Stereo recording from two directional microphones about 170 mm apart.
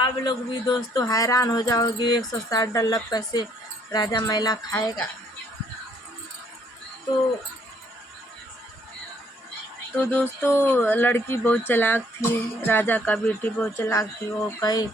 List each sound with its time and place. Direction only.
0.0 s speech: 25° left (ahead or behind)
10.0 s speech: 10° left (ahead or behind)